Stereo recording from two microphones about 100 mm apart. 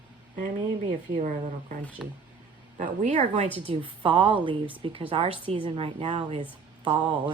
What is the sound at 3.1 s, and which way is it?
Speech, 90° right.